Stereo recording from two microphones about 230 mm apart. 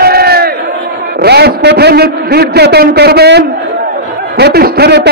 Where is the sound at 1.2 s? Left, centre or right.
Right.